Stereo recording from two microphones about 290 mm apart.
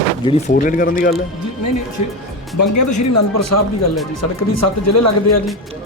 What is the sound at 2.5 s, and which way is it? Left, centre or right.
Speech, left.